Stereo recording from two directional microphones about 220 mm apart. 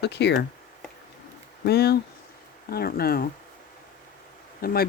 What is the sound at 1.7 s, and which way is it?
Speech, 45° left (ahead or behind).